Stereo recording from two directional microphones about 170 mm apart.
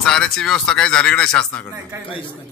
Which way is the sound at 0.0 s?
5° left (ahead or behind).